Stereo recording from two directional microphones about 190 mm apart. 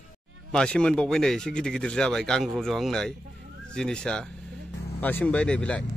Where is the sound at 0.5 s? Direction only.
5° left (ahead or behind).